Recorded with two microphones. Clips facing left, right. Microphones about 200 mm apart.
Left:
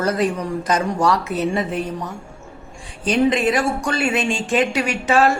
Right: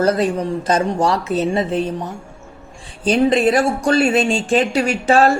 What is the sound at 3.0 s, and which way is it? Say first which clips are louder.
Speech: right 3 dB; 35° right (ahead or behind).